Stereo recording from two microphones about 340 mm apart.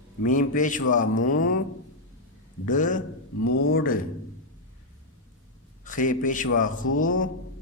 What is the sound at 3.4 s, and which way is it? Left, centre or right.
Speech, left.